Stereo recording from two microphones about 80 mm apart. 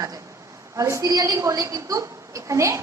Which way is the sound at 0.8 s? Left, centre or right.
Right.